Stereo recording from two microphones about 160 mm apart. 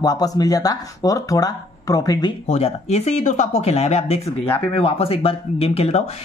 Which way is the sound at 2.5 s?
40° left (ahead or behind).